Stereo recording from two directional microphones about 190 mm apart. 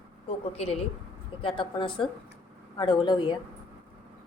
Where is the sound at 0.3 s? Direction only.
35° left (ahead or behind).